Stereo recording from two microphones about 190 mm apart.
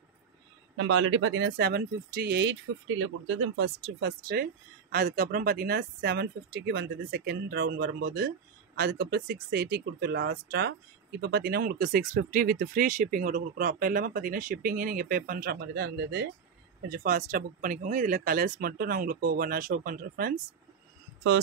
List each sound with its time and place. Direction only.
0.7 s speech: 90° right; by 2.5 s 60° right (ahead or behind)
3.0 s speech: 90° right; by 20.3 s 50° right (ahead or behind)